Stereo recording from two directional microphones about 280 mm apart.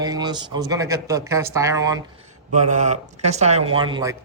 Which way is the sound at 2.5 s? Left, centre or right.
Right.